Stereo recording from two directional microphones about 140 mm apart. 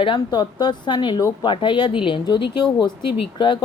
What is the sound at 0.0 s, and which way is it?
Speech, 35° left (ahead or behind).